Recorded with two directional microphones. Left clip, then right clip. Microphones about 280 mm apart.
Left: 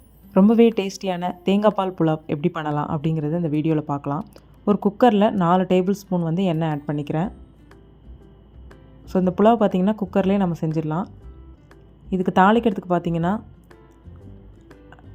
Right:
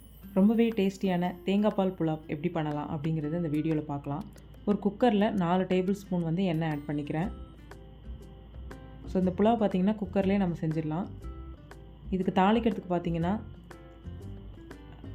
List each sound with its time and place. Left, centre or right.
0.3 s a woman's voice: left
9.0 s a woman's voice: left
12.1 s a woman's voice: centre